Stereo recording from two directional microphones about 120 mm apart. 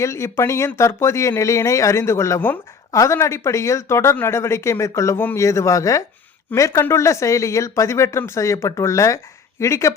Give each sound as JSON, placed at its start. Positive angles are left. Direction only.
{"t": 0.0, "sound": "speech", "side_deg": 25}